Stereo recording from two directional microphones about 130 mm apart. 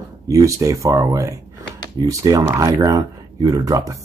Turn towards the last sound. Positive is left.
turn(degrees=-25)  # may be behind; listen again after turning